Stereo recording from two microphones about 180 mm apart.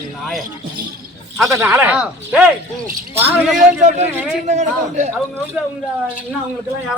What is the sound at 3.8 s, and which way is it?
A man's voice, 40° right (ahead or behind).